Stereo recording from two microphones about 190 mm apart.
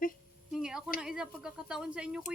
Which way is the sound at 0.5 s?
Centre (ahead or behind).